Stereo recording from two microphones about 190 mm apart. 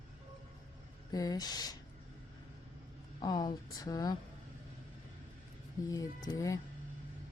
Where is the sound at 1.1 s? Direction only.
20° left (ahead or behind).